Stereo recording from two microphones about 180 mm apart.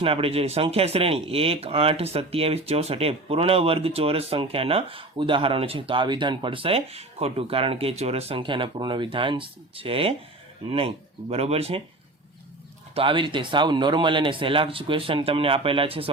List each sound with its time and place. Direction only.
0.0 s speech: 30° right (ahead or behind)
12.9 s speech: 30° right (ahead or behind)